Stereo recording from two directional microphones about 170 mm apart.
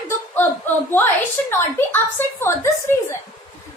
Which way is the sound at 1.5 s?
15° left (ahead or behind).